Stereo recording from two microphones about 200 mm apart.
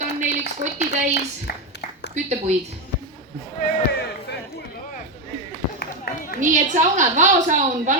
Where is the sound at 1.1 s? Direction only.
55° left (ahead or behind).